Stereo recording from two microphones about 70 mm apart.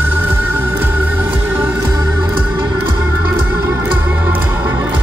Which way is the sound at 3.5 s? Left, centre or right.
Right.